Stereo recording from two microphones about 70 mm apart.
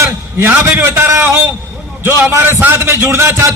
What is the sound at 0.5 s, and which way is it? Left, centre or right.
A man's voice, right.